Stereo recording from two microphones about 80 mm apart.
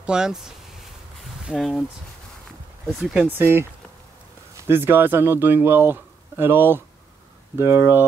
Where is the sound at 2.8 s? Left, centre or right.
Centre.